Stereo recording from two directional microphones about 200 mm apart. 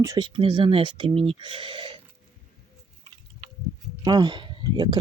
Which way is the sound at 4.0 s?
20° right (ahead or behind).